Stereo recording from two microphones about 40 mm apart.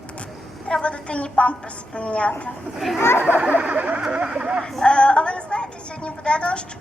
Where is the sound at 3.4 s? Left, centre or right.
Right.